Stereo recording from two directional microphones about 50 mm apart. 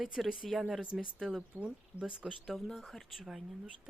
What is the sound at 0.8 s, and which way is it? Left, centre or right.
Speech, centre.